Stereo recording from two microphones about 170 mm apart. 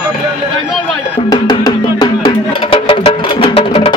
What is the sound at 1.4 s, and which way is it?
Music, 25° left (ahead or behind).